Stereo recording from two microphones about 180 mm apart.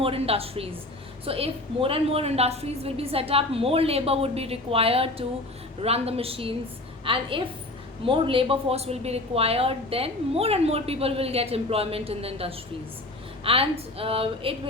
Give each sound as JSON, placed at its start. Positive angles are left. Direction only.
{"t": 0.0, "sound": "a woman's voice", "side_deg": -30}